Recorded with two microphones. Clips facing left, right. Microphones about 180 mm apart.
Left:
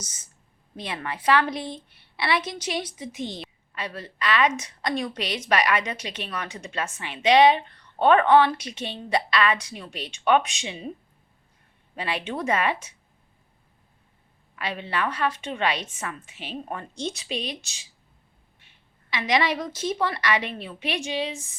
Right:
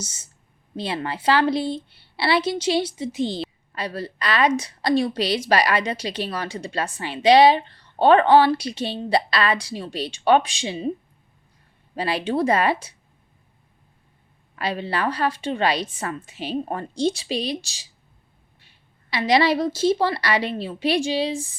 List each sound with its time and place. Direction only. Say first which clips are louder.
0.0 s a woman's voice: right 7 dB; 30° right (ahead or behind)
11.9 s a woman's voice: right 7 dB; 35° right (ahead or behind)
14.5 s a woman's voice: right 4 dB; 35° right (ahead or behind)
19.1 s a woman's voice: right 5 dB; 35° right (ahead or behind)